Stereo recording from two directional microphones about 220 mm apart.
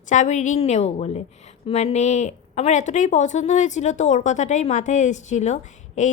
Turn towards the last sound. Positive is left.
turn(degrees=35)  # may be behind; listen again after turning